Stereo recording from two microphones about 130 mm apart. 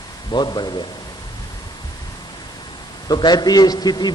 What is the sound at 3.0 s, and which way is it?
A man's voice, 35° left (ahead or behind).